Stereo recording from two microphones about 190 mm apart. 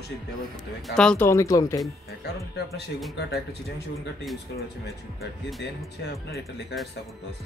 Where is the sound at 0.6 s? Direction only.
Centre (ahead or behind); by 1.8 s 20° left (ahead or behind).